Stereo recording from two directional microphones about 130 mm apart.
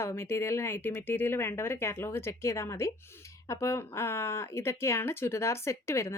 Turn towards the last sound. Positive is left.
turn(degrees=20)  # may be behind; listen again after turning